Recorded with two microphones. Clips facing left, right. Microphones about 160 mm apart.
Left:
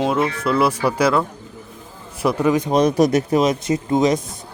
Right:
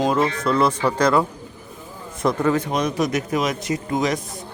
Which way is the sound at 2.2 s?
15° left (ahead or behind).